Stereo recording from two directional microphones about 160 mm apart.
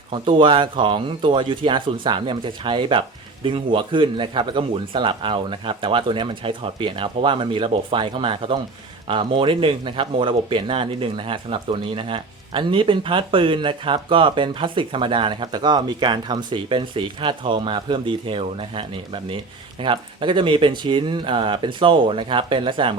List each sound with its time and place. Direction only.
0.1 s speech: 30° right (ahead or behind)